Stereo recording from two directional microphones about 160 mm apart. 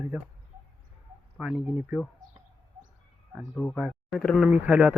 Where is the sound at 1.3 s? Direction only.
5° right (ahead or behind).